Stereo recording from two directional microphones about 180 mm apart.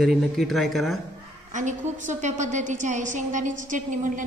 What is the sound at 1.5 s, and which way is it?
A woman's voice, 45° right (ahead or behind).